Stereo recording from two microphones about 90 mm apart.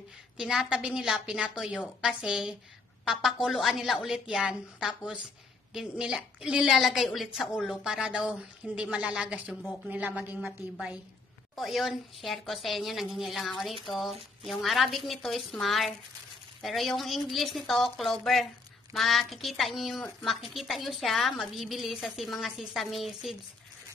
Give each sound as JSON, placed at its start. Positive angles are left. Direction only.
{"t": 0.4, "sound": "a woman's voice", "side_deg": -5}
{"t": 11.5, "sound": "a woman's voice", "side_deg": 0}